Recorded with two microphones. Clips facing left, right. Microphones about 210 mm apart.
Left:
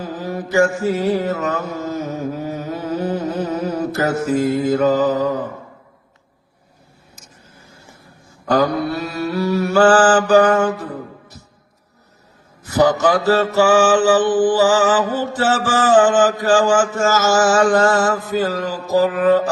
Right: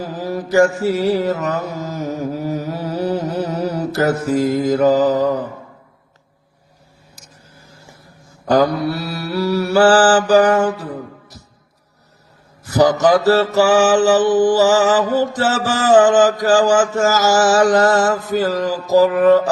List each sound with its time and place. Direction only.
0.0 s mantra: 35° right (ahead or behind)
8.4 s mantra: 40° right (ahead or behind)
12.6 s a man's voice: 40° right (ahead or behind)
13.2 s mantra: 40° right (ahead or behind)